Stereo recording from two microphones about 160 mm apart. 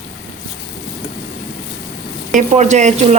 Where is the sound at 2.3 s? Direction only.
50° right (ahead or behind).